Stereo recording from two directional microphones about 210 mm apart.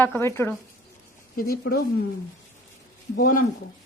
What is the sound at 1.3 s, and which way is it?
Speech, 45° left (ahead or behind).